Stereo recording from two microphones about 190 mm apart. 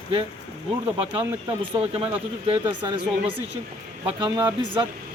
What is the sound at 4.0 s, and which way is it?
Speech, 25° right (ahead or behind).